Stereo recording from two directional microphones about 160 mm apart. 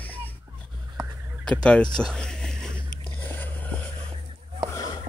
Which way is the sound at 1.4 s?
5° left (ahead or behind).